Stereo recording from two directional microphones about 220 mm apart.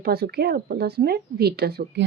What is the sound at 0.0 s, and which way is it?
Speech, 45° right (ahead or behind).